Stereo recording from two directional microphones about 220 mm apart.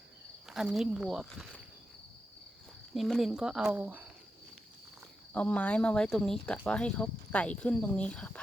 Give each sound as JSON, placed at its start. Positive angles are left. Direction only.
{"t": 0.5, "sound": "speech", "side_deg": 0}
{"t": 2.9, "sound": "speech", "side_deg": 0}
{"t": 5.3, "sound": "speech", "side_deg": 5}